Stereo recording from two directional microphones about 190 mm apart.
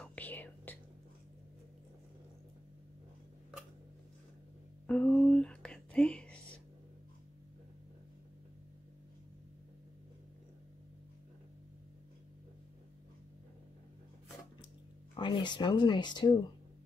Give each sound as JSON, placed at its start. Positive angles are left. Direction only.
{"t": 0.0, "sound": "whispering", "side_deg": 10}
{"t": 4.8, "sound": "a sound", "side_deg": 5}
{"t": 15.1, "sound": "speech", "side_deg": 25}